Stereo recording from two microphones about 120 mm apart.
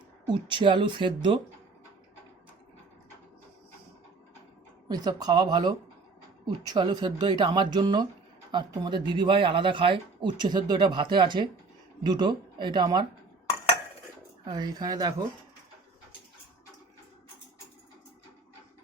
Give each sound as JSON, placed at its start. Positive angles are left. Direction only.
{"t": 0.3, "sound": "speech", "side_deg": -40}
{"t": 4.9, "sound": "speech", "side_deg": -35}
{"t": 14.4, "sound": "speech", "side_deg": -35}